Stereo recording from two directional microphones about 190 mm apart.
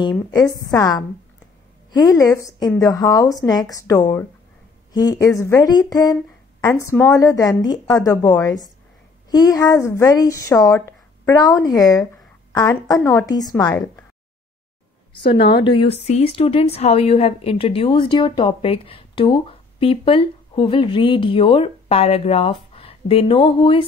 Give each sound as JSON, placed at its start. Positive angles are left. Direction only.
{"t": 0.3, "sound": "a woman's voice", "side_deg": 15}
{"t": 15.3, "sound": "a woman's voice", "side_deg": 60}
{"t": 15.6, "sound": "a woman's voice", "side_deg": 25}